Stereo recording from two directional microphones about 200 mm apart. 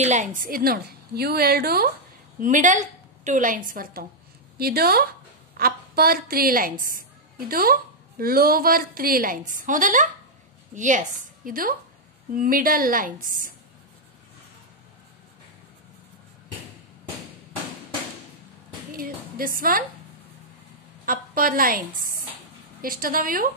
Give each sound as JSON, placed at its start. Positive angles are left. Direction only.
{"t": 0.0, "sound": "a woman's voice", "side_deg": -35}
{"t": 2.4, "sound": "a woman's voice", "side_deg": -40}
{"t": 18.9, "sound": "a woman's voice", "side_deg": -45}
{"t": 21.0, "sound": "a woman's voice", "side_deg": -45}